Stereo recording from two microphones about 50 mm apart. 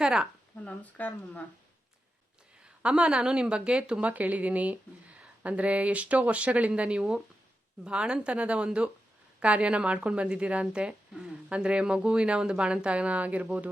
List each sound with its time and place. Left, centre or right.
0.0 s speech: centre
0.6 s speech: left
2.8 s speech: right
4.1 s speech: right